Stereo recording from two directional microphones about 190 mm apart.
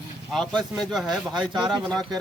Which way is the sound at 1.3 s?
25° right (ahead or behind).